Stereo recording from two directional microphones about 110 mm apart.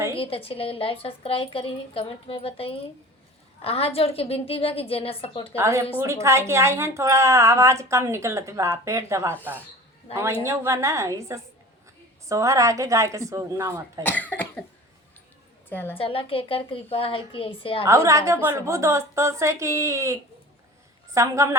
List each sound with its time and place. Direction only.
0.2 s a woman's voice: 60° left (ahead or behind)
5.5 s a woman's voice: 25° right (ahead or behind)
14.0 s speech: 15° left (ahead or behind)
15.7 s a woman's voice: 20° left (ahead or behind)
16.0 s a woman's voice: 55° left (ahead or behind)
17.8 s a woman's voice: 30° right (ahead or behind)